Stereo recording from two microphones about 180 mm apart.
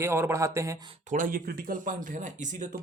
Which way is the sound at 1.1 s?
50° right (ahead or behind).